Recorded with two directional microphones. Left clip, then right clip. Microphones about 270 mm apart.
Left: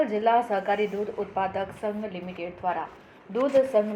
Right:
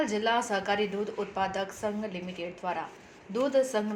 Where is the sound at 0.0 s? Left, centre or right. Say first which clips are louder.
Left 5 dB; right.